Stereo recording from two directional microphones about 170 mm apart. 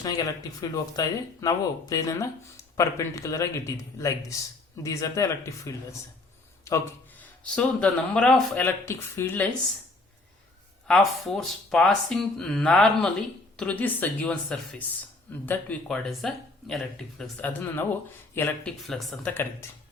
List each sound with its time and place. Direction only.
0.0 s speech: 20° left (ahead or behind)
10.8 s speech: 5° left (ahead or behind)
19.3 s speech: 15° left (ahead or behind)